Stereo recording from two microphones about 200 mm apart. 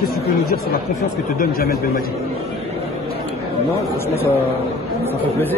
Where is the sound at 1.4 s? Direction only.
50° left (ahead or behind).